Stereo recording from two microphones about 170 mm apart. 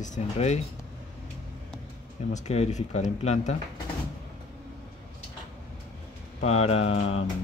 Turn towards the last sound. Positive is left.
turn(degrees=35)  # may be behind; listen again after turning